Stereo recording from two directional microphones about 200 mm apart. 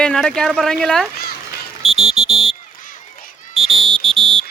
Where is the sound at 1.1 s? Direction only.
50° left (ahead or behind).